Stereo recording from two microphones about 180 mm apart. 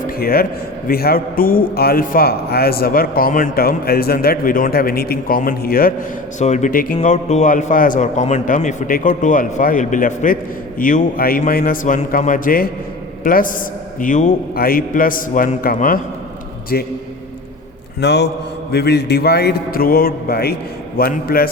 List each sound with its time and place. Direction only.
0.2 s a man's voice: 55° left (ahead or behind)
6.4 s a man's voice: 40° left (ahead or behind)
14.5 s a man's voice: 55° left (ahead or behind)
18.0 s a man's voice: 70° left (ahead or behind)